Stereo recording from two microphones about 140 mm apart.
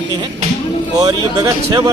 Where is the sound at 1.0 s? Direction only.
25° right (ahead or behind).